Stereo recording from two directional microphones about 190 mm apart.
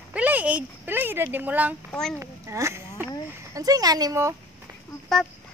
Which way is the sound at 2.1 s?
15° right (ahead or behind).